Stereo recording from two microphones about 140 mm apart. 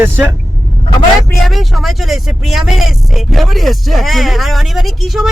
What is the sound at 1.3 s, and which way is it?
Speech, centre (ahead or behind).